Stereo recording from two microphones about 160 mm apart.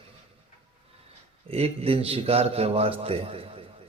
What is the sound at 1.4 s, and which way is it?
Speech, 40° right (ahead or behind).